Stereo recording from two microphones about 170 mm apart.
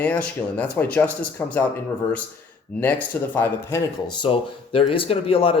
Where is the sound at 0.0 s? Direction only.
10° left (ahead or behind).